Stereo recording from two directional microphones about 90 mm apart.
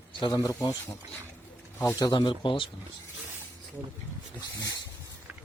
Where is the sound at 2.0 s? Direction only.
55° left (ahead or behind).